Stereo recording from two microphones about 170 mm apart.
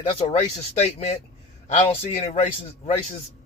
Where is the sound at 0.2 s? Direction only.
35° left (ahead or behind).